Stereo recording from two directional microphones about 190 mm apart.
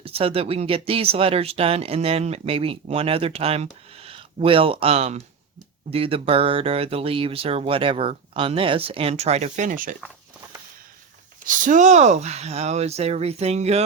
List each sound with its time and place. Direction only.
0.0 s speech: 30° right (ahead or behind)
11.4 s speech: 40° right (ahead or behind)